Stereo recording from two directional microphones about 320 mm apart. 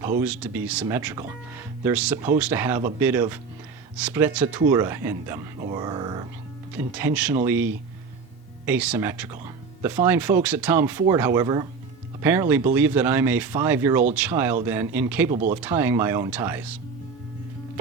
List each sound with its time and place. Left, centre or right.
0.0 s speech: centre
15.3 s speech: right
15.6 s speech: centre